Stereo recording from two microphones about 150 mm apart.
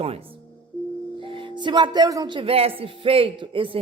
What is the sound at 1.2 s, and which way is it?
A man's voice, 35° right (ahead or behind).